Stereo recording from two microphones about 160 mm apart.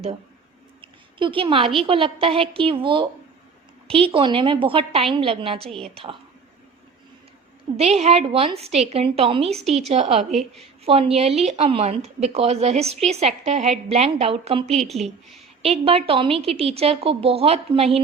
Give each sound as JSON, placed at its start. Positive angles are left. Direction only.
{"t": 0.8, "sound": "a sound", "side_deg": -35}
{"t": 1.8, "sound": "speech", "side_deg": -35}
{"t": 5.6, "sound": "a woman's voice", "side_deg": 0}
{"t": 7.8, "sound": "speech", "side_deg": -40}
{"t": 14.8, "sound": "a woman's voice", "side_deg": 0}
{"t": 15.6, "sound": "speech", "side_deg": -40}